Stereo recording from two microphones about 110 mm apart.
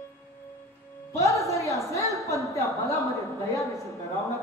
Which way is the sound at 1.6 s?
30° left (ahead or behind).